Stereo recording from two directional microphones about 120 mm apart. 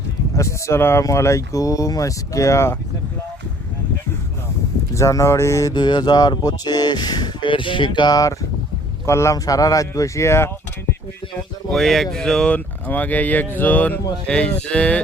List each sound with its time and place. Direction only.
0.3 s speech: 25° left (ahead or behind)
4.9 s speech: 25° left (ahead or behind)
5.7 s speech: 40° left (ahead or behind); by 10.5 s 20° left (ahead or behind)
11.7 s speech: centre (ahead or behind)